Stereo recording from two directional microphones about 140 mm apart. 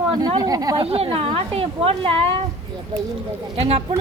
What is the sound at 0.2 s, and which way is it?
Speech, 25° right (ahead or behind).